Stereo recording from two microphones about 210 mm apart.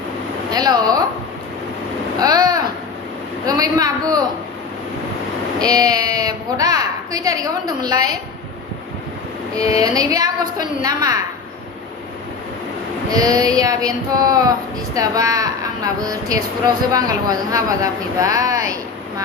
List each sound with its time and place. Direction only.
0.5 s speech: 20° right (ahead or behind)
2.1 s a sound: 20° right (ahead or behind)
5.5 s a woman's voice: 15° right (ahead or behind)
9.8 s a woman's voice: 15° right (ahead or behind)
13.1 s a woman's voice: 15° right (ahead or behind)